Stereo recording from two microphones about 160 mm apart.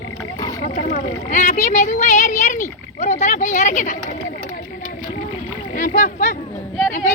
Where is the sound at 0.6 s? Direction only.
55° left (ahead or behind).